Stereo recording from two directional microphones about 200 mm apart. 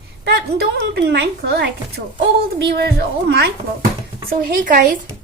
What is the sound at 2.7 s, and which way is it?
A child's voice, 55° right (ahead or behind).